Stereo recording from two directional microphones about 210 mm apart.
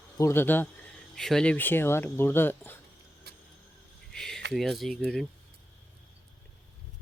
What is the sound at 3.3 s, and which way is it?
Vehicle, 50° right (ahead or behind).